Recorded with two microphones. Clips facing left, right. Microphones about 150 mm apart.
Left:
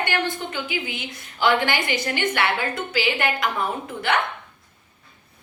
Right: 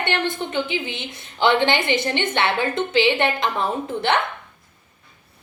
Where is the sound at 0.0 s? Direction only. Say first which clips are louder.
Right 2 dB; 25° right (ahead or behind).